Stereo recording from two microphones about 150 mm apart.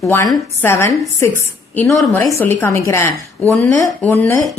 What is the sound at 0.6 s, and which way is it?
A woman's voice, 15° left (ahead or behind).